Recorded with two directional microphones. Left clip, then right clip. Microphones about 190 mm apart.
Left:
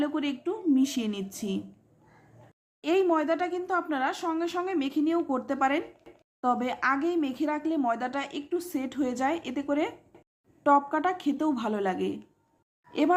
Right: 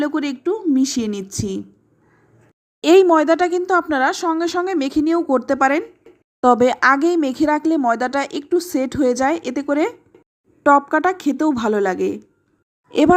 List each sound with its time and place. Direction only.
0.0 s a woman's voice: 30° right (ahead or behind)
2.8 s speech: 40° right (ahead or behind)